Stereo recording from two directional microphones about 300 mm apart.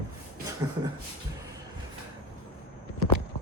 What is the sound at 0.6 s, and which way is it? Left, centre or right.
Speech, centre.